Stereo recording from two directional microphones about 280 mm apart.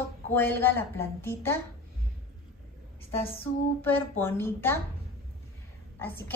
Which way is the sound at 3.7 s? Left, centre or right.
Centre.